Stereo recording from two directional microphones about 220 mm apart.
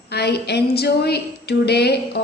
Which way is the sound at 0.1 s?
50° left (ahead or behind).